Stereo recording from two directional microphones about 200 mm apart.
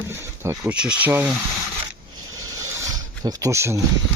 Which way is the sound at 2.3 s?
15° right (ahead or behind).